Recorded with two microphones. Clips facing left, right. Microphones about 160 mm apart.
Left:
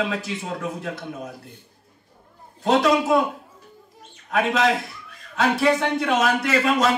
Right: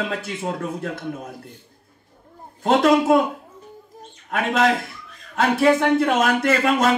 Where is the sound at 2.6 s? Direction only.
50° right (ahead or behind).